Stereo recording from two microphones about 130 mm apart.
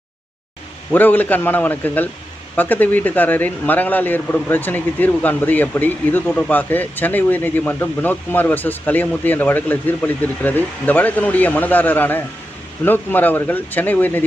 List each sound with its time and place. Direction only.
0.9 s speech: 15° left (ahead or behind)